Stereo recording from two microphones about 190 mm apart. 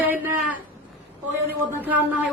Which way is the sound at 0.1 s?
10° right (ahead or behind).